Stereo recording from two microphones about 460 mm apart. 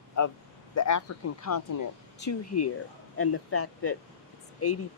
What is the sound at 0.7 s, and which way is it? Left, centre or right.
Speech, left.